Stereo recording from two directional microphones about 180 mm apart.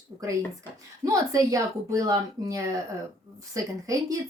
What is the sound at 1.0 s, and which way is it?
Speech, 20° right (ahead or behind).